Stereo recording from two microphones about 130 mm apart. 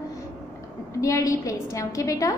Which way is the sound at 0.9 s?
25° left (ahead or behind).